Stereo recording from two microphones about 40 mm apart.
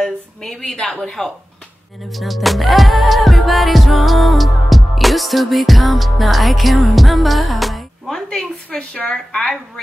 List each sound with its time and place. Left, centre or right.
0.0 s a woman's voice: centre
2.1 s music: centre
8.1 s a woman's voice: centre
8.6 s a woman's voice: left